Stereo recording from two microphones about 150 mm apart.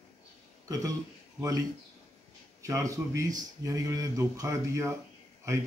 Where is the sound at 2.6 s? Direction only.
20° right (ahead or behind).